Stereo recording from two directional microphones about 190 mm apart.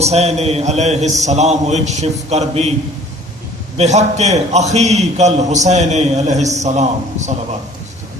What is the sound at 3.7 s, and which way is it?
A man's voice, 35° right (ahead or behind).